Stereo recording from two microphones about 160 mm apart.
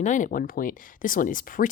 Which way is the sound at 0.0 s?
50° left (ahead or behind).